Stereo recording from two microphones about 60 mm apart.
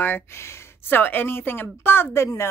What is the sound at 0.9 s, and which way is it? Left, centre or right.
A woman's voice, left.